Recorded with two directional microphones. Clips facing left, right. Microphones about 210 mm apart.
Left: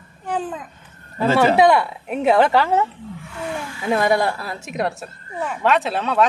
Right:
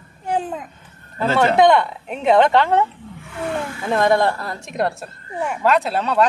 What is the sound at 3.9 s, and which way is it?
A woman's voice, 10° left (ahead or behind).